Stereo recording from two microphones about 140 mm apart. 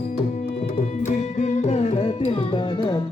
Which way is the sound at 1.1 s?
60° left (ahead or behind).